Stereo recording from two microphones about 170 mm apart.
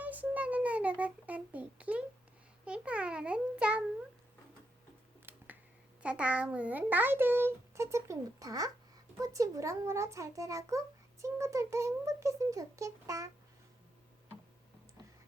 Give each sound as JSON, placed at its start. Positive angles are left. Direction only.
{"t": 0.0, "sound": "a child's voice", "side_deg": -10}
{"t": 6.0, "sound": "a child's voice", "side_deg": -5}